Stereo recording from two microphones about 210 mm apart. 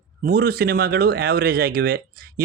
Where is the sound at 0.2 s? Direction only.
50° right (ahead or behind).